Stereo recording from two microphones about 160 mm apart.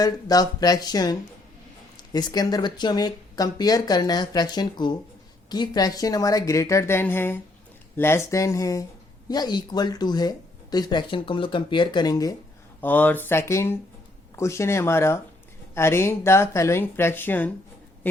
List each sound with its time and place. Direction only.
0.0 s speech: 25° left (ahead or behind)
12.8 s speech: 10° left (ahead or behind)